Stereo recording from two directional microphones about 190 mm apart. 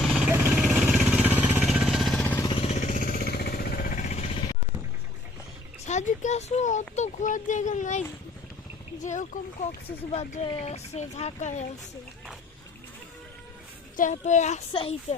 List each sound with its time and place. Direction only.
0.0 s vehicle: 5° right (ahead or behind)
2.5 s vehicle: 30° left (ahead or behind)
5.8 s speech: 40° left (ahead or behind)
13.9 s speech: 40° left (ahead or behind)